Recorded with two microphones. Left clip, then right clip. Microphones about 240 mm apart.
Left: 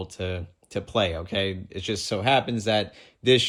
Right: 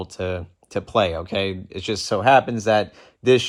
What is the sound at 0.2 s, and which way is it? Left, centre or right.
Speech, centre.